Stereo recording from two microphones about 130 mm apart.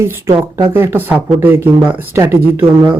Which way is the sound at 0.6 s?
20° right (ahead or behind).